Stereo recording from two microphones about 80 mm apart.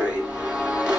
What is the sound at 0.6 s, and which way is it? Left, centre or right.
Music, centre.